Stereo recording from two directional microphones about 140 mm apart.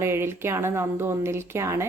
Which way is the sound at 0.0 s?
20° right (ahead or behind).